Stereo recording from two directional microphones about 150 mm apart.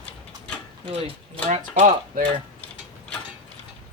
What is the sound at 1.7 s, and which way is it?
Speech, 55° right (ahead or behind).